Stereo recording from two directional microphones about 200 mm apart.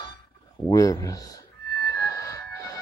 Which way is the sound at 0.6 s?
15° left (ahead or behind).